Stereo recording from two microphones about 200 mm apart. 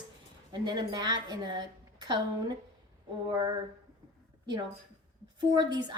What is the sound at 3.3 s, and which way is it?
Speech, 20° right (ahead or behind).